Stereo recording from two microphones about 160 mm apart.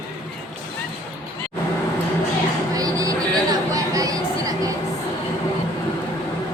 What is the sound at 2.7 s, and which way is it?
Chatter, 20° right (ahead or behind).